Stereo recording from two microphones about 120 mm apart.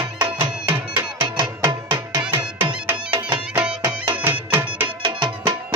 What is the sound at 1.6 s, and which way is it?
Music, 40° right (ahead or behind).